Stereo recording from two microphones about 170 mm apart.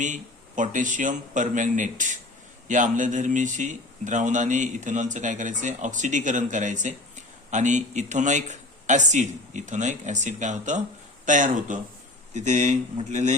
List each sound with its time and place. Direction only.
0.0 s speech: 45° right (ahead or behind)